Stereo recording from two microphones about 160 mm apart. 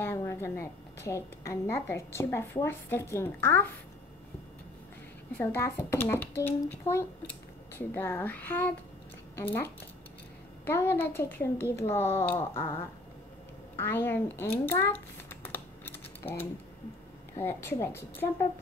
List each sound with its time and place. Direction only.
0.0 s a woman's voice: 20° left (ahead or behind)
5.4 s a woman's voice: 15° left (ahead or behind)
13.7 s a woman's voice: 15° left (ahead or behind)
15.4 s typing: 10° left (ahead or behind)
17.3 s a woman's voice: 15° left (ahead or behind)